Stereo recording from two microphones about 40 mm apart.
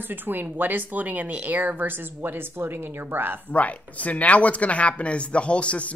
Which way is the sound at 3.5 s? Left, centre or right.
Left.